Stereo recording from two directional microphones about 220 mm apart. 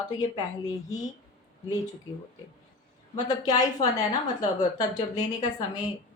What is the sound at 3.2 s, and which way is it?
A woman's voice, 15° left (ahead or behind).